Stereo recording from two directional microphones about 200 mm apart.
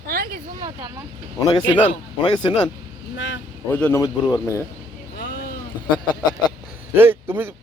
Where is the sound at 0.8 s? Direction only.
15° right (ahead or behind).